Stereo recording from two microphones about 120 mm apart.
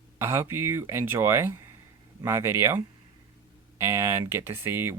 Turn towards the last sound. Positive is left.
turn(degrees=-20)  # may be behind; listen again after turning